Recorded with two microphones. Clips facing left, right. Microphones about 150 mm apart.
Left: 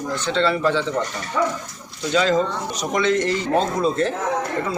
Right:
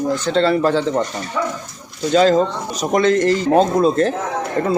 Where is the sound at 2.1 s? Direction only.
40° right (ahead or behind).